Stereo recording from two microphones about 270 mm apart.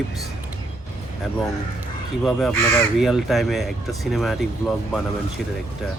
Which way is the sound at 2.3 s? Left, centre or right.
Centre.